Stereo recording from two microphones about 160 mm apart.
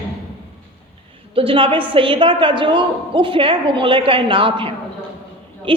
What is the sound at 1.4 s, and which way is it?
A woman's voice, 35° right (ahead or behind).